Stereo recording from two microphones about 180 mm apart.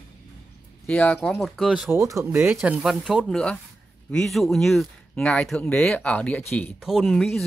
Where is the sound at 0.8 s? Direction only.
5° left (ahead or behind).